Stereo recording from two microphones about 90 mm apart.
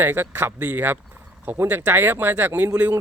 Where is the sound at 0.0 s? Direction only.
25° right (ahead or behind).